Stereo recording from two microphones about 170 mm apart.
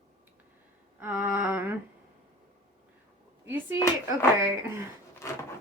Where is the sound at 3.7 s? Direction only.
20° left (ahead or behind).